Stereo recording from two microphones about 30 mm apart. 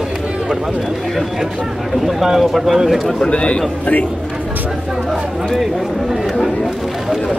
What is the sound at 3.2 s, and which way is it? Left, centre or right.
Speech, left.